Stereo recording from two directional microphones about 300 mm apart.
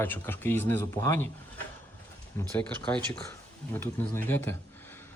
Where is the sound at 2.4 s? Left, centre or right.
Centre.